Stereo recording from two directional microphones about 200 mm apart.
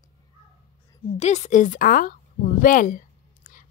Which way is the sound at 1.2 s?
35° left (ahead or behind).